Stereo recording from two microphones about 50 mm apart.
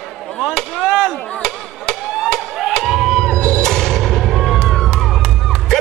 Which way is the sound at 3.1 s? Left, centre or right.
Centre.